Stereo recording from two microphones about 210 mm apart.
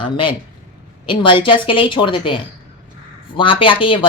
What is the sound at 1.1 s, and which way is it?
A woman's voice, 25° left (ahead or behind).